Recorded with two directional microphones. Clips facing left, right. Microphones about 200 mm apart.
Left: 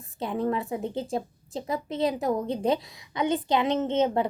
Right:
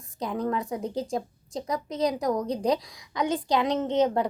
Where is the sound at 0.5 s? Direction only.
5° left (ahead or behind).